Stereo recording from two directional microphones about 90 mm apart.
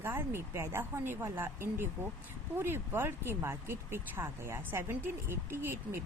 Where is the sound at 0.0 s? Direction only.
25° right (ahead or behind).